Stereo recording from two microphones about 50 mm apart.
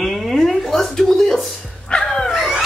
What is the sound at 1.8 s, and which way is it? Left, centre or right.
Dog, centre.